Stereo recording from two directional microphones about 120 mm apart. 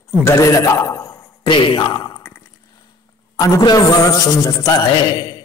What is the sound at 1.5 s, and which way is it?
Speech, 45° left (ahead or behind).